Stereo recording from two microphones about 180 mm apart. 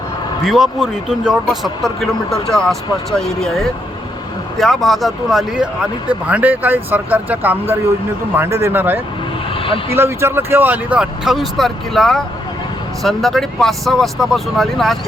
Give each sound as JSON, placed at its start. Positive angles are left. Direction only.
{"t": 0.4, "sound": "speech", "side_deg": 0}
{"t": 9.6, "sound": "vehicle", "side_deg": 30}
{"t": 9.9, "sound": "speech", "side_deg": -15}